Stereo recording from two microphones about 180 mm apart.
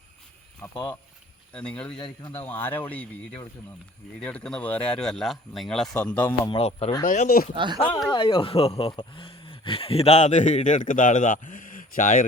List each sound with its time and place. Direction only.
0.6 s speech: 25° left (ahead or behind)
1.5 s speech: 5° left (ahead or behind)
6.5 s speech: 30° left (ahead or behind)
7.0 s speech: 45° left (ahead or behind)
7.5 s speech: 25° right (ahead or behind)
8.1 s speech: 30° left (ahead or behind); by 12.2 s 50° left (ahead or behind)